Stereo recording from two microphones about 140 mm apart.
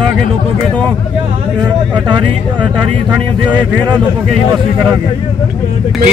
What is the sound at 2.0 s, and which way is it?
Speech, 10° right (ahead or behind).